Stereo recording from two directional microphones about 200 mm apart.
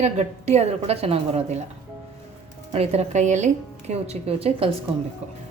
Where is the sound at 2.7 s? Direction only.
30° right (ahead or behind).